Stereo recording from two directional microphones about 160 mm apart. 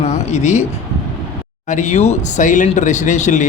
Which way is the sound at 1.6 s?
50° left (ahead or behind).